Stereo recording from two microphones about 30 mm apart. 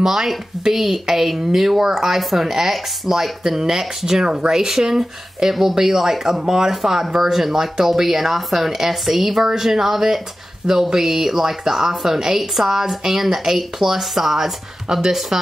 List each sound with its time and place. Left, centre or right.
0.0 s speech: centre